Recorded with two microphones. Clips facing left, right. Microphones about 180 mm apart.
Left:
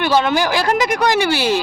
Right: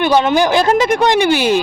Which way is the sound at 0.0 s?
20° right (ahead or behind).